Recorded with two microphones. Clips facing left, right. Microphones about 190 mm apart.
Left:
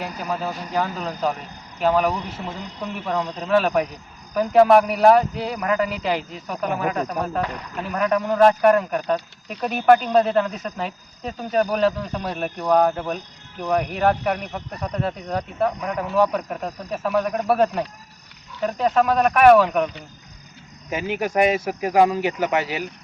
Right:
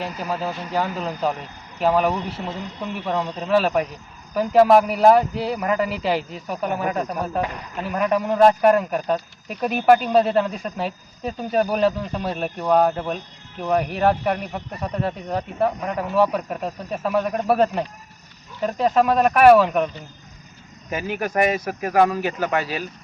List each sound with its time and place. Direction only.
0.0 s speech: centre (ahead or behind)
20.9 s speech: 15° left (ahead or behind)